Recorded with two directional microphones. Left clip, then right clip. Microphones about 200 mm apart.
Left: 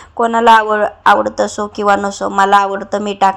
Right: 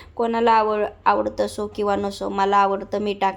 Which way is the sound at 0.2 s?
20° left (ahead or behind).